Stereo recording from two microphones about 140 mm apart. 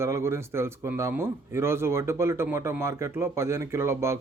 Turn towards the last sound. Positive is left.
turn(degrees=-20)  # may be behind; listen again after turning